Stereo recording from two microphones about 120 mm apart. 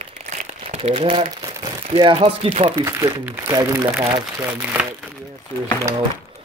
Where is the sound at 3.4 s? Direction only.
25° right (ahead or behind).